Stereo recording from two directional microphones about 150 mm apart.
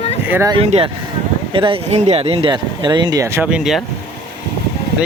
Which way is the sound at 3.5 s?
5° right (ahead or behind).